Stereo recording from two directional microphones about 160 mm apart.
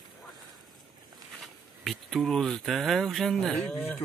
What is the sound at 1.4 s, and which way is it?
Speech, centre (ahead or behind).